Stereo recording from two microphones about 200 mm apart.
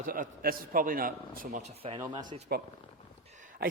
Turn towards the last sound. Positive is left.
turn(degrees=-40)  # may be behind; listen again after turning